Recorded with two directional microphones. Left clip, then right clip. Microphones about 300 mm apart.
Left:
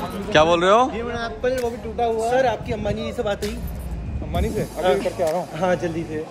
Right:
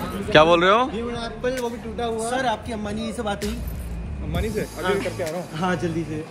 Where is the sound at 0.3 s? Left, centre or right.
Centre.